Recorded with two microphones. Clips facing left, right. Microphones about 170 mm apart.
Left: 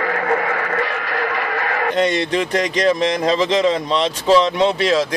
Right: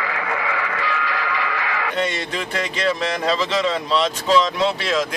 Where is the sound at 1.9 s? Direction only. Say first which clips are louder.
Left 8 dB; 35° left (ahead or behind).